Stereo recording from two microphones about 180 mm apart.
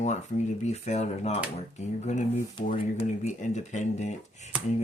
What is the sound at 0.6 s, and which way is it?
Speech, 40° left (ahead or behind).